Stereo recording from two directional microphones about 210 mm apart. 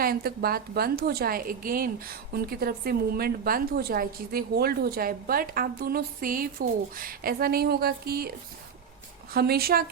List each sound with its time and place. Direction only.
0.0 s a woman's voice: 45° right (ahead or behind)
9.3 s a woman's voice: 45° right (ahead or behind)